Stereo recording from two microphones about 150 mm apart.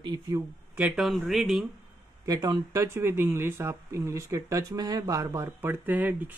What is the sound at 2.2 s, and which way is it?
Speech, 25° right (ahead or behind).